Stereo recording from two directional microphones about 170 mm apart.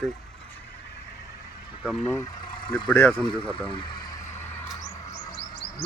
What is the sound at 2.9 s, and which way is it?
Speech, 10° left (ahead or behind).